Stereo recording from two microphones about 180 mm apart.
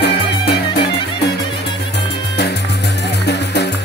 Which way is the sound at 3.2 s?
70° left (ahead or behind).